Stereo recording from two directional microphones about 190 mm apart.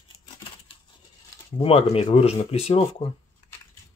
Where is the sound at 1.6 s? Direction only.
30° left (ahead or behind).